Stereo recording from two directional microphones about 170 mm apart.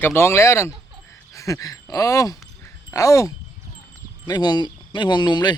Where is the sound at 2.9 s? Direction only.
20° left (ahead or behind).